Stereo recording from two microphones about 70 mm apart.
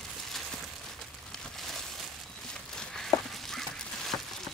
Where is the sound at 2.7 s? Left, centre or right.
Centre.